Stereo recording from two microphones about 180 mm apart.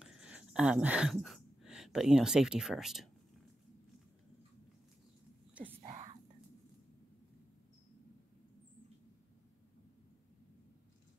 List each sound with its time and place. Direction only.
0.0 s speech: 5° right (ahead or behind)
5.5 s whispering: 10° right (ahead or behind)
5.9 s whispering: 35° right (ahead or behind)